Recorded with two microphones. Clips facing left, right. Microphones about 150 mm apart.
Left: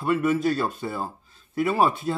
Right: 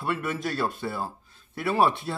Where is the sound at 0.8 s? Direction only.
10° left (ahead or behind).